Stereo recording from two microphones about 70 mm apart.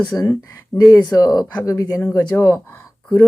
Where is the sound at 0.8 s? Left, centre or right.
Left.